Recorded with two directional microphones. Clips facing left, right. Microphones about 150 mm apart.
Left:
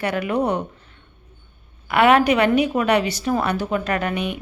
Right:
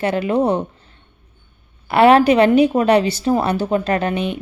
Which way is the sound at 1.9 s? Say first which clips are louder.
Right 4 dB; 30° right (ahead or behind).